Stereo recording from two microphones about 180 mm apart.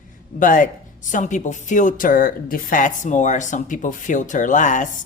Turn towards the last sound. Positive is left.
turn(degrees=45)  # may be behind; listen again after turning